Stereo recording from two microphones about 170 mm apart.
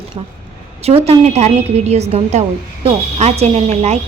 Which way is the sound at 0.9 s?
40° right (ahead or behind).